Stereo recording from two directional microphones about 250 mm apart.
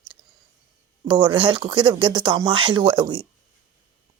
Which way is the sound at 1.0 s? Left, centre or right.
Centre.